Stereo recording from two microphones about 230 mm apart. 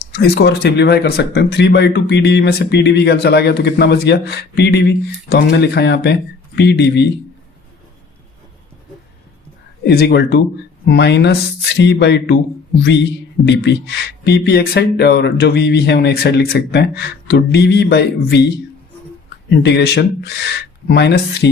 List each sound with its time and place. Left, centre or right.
0.1 s speech: left
9.8 s speech: left
13.4 s speech: left
19.6 s speech: left